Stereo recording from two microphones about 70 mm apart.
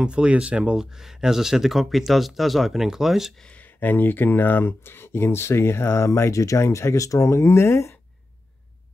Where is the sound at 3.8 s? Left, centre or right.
Left.